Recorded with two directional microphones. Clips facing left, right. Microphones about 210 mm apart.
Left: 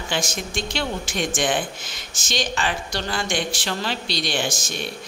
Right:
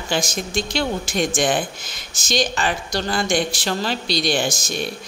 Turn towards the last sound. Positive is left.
turn(degrees=-40)  # may be behind; listen again after turning